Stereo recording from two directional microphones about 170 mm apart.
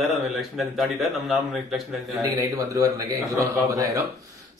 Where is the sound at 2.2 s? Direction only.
20° right (ahead or behind).